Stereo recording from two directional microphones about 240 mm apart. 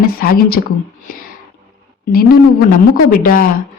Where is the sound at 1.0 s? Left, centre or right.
Left.